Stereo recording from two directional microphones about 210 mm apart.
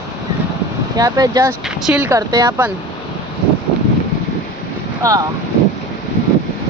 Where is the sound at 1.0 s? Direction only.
15° right (ahead or behind).